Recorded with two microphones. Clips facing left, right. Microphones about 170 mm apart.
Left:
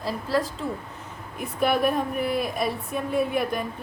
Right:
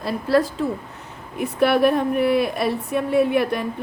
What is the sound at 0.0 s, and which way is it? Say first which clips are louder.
Speech: right 6 dB; 65° right (ahead or behind).